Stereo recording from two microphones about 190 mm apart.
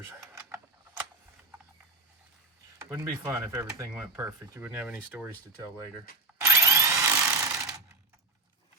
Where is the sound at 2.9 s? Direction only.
15° right (ahead or behind).